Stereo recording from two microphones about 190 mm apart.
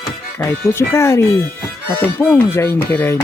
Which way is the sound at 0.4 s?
15° left (ahead or behind).